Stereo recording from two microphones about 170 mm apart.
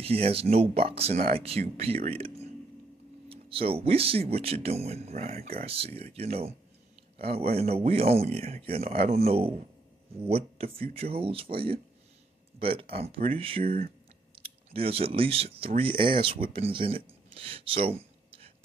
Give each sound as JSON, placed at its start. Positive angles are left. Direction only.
{"t": 0.0, "sound": "a man's voice", "side_deg": -35}